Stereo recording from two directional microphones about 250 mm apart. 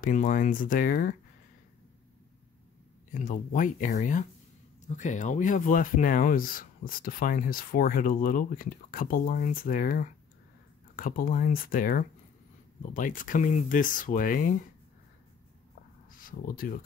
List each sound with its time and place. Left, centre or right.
0.0 s speech: left
3.2 s speech: left
16.1 s speech: left